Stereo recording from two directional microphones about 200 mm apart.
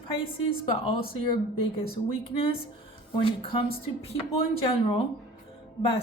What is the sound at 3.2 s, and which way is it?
Speech, 25° left (ahead or behind).